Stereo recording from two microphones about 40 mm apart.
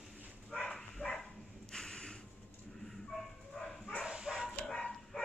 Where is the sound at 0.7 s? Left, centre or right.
Centre.